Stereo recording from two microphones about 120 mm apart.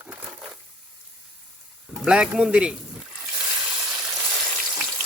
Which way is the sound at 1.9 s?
5° right (ahead or behind).